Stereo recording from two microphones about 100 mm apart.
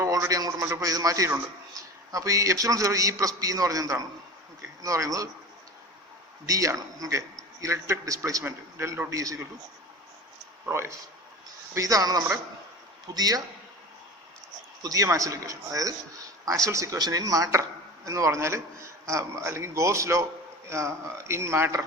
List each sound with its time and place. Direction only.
0.0 s a man's voice: 30° right (ahead or behind)
6.4 s a man's voice: 35° right (ahead or behind)
10.7 s a man's voice: 25° right (ahead or behind)
14.8 s a man's voice: 35° right (ahead or behind)